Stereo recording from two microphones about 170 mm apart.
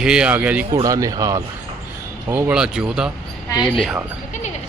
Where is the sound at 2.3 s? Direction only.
5° right (ahead or behind).